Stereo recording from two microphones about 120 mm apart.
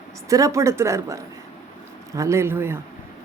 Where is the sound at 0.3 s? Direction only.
25° right (ahead or behind).